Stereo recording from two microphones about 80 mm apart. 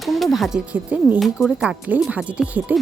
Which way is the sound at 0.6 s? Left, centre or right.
Centre.